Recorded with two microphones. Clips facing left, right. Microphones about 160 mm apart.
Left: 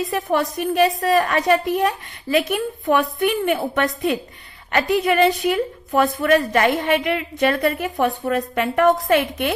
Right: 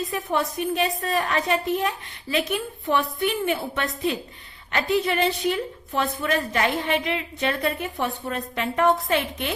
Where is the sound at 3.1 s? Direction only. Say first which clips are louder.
Left 5 dB; 55° left (ahead or behind).